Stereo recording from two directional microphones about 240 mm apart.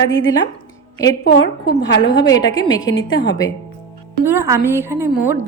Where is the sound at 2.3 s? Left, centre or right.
Centre.